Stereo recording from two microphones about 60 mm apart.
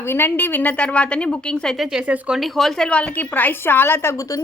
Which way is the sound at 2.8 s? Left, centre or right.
Centre.